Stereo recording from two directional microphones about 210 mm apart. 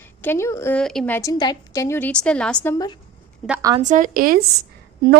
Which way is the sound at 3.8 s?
40° right (ahead or behind).